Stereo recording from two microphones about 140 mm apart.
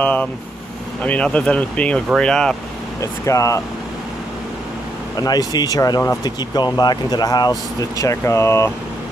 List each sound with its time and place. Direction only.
0.0 s speech: 10° left (ahead or behind)
3.0 s speech: 20° left (ahead or behind)
5.1 s speech: 25° left (ahead or behind)